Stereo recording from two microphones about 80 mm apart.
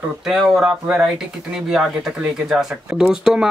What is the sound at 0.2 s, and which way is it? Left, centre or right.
A man's voice, centre.